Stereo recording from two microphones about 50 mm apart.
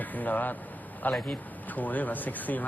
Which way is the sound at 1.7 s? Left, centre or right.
Left.